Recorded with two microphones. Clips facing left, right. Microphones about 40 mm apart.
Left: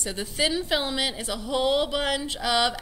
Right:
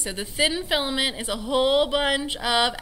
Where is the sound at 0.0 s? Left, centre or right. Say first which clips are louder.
Right 2 dB; centre.